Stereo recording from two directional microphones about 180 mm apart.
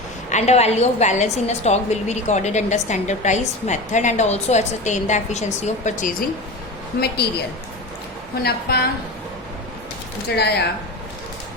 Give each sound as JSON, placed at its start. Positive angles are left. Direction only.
{"t": 0.3, "sound": "a woman's voice", "side_deg": 40}
{"t": 7.2, "sound": "a woman's voice", "side_deg": 65}
{"t": 8.4, "sound": "a woman's voice", "side_deg": 65}
{"t": 10.3, "sound": "a woman's voice", "side_deg": 65}